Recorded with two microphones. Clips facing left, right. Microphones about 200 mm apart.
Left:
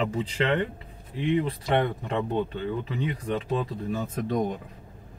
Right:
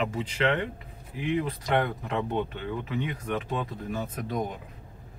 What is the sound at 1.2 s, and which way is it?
Speech, 30° left (ahead or behind).